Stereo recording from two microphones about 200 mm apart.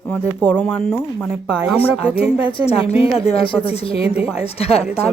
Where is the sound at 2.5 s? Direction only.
30° left (ahead or behind).